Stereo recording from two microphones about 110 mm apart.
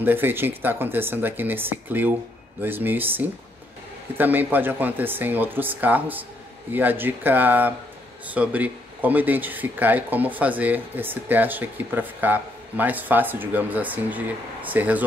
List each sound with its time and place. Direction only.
0.0 s speech: 20° right (ahead or behind)